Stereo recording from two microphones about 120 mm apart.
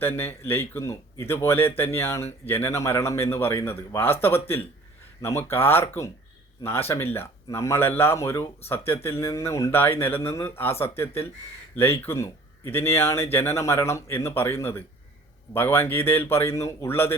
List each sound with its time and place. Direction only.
0.0 s speech: 20° left (ahead or behind)